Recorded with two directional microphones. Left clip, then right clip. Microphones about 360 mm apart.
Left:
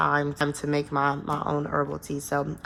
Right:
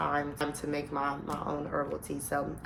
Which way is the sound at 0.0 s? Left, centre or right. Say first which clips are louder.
Left 7 dB; left.